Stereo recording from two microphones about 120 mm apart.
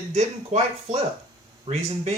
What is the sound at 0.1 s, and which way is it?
Speech, 65° right (ahead or behind).